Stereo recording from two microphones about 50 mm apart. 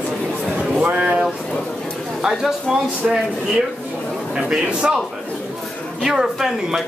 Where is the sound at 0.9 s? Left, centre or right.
Right.